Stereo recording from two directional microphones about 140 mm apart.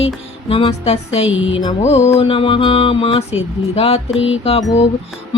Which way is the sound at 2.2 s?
40° left (ahead or behind).